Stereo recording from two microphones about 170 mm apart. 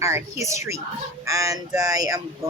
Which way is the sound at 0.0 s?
15° right (ahead or behind).